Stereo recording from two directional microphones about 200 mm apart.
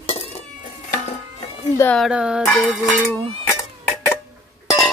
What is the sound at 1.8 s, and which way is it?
Speech, 5° left (ahead or behind).